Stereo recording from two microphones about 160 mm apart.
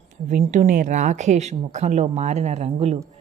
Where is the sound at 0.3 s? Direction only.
50° right (ahead or behind).